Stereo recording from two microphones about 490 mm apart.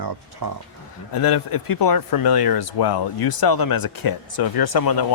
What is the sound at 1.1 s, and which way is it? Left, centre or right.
Speech, left.